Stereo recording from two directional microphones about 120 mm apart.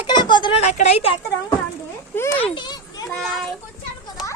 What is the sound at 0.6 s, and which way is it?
Speech, 65° left (ahead or behind).